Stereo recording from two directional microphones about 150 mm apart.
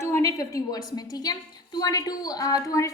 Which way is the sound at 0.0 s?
20° left (ahead or behind).